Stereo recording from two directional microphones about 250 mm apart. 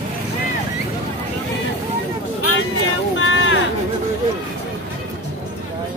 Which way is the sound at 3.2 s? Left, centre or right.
Left.